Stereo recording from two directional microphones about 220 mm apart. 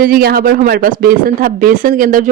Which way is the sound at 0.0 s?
45° right (ahead or behind).